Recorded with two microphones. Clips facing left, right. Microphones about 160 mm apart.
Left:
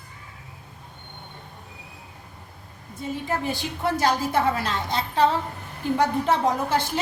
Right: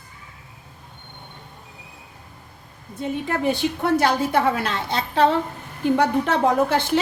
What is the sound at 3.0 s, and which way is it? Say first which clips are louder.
A woman's voice: right 3 dB; 65° right (ahead or behind).